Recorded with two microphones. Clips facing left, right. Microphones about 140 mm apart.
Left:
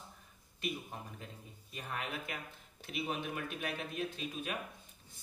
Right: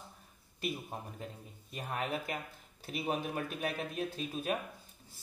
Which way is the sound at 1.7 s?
40° right (ahead or behind).